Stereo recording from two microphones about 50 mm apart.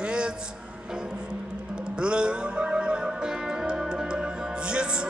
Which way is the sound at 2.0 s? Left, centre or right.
Centre.